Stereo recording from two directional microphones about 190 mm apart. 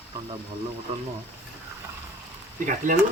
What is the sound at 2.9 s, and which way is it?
Speech, 45° right (ahead or behind).